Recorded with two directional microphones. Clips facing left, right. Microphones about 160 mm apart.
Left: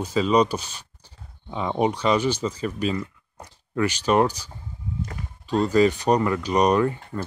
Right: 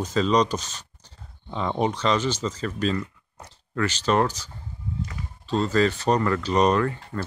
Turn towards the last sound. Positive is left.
turn(degrees=10)  # may be behind; listen again after turning